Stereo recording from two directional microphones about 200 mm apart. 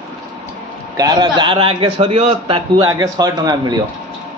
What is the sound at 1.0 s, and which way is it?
A man's voice, 20° right (ahead or behind).